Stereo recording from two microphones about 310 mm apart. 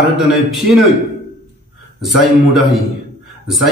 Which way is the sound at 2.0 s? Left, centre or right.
Centre.